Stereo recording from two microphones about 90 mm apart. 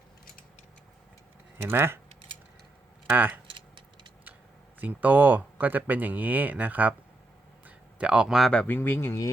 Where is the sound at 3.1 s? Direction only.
20° right (ahead or behind).